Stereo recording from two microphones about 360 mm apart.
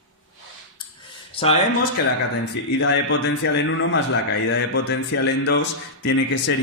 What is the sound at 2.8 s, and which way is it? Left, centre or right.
A man's voice, left.